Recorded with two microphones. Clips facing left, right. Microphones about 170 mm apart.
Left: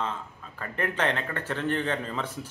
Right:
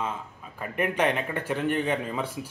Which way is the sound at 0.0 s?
10° right (ahead or behind).